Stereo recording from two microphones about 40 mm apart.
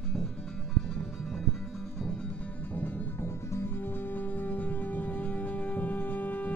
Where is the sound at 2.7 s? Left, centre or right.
Left.